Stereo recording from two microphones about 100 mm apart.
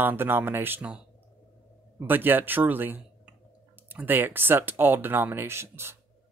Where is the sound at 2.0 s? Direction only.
20° right (ahead or behind).